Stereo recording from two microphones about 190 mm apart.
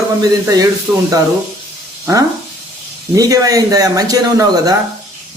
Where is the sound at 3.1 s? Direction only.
20° right (ahead or behind).